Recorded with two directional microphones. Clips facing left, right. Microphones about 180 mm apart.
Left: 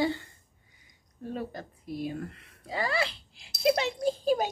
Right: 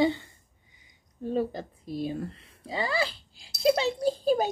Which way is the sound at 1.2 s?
30° right (ahead or behind).